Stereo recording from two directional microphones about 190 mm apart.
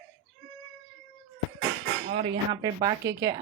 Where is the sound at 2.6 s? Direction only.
20° right (ahead or behind).